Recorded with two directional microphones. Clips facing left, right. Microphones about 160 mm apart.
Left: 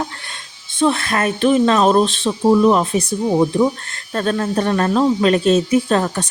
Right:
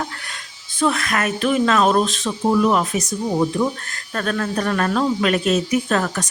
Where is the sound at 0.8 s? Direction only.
30° left (ahead or behind).